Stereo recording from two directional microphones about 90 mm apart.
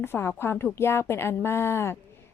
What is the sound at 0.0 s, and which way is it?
A woman's voice, 25° left (ahead or behind).